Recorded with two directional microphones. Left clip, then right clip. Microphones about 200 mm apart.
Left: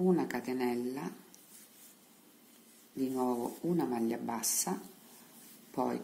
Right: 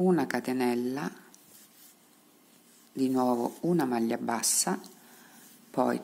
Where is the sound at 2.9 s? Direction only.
25° right (ahead or behind).